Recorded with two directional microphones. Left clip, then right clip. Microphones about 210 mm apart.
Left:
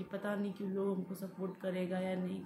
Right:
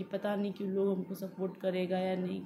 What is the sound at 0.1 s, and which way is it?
Speech, 15° left (ahead or behind).